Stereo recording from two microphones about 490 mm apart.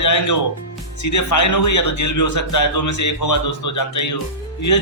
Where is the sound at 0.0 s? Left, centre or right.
Left.